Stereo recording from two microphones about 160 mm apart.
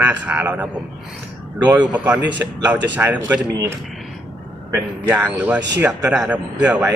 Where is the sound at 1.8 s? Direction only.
10° right (ahead or behind).